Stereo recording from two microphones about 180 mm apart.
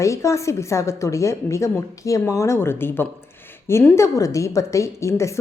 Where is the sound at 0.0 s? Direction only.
15° left (ahead or behind).